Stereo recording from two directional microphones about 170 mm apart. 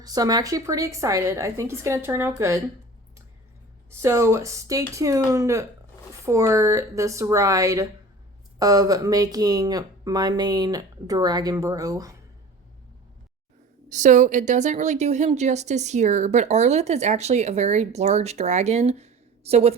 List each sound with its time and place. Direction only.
0.0 s a woman's voice: 20° right (ahead or behind)
3.8 s a woman's voice: 15° right (ahead or behind)
13.9 s a woman's voice: 45° right (ahead or behind)